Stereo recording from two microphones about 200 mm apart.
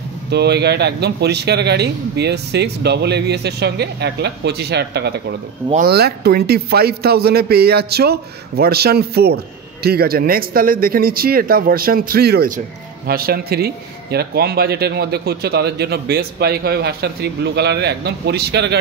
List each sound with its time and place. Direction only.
0.3 s a man's voice: 55° right (ahead or behind)